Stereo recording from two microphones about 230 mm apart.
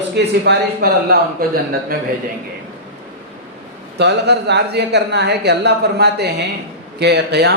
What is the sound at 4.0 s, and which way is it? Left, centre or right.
Speech, right.